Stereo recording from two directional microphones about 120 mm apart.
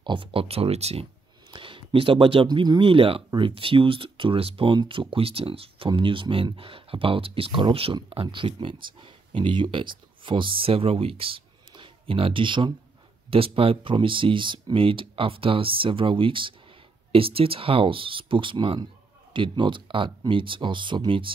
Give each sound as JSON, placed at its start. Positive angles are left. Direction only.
{"t": 0.0, "sound": "speech", "side_deg": -45}
{"t": 1.5, "sound": "speech", "side_deg": -45}